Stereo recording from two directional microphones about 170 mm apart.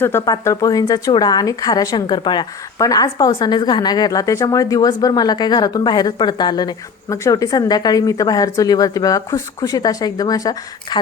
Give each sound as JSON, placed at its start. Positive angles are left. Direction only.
{"t": 0.0, "sound": "speech", "side_deg": 15}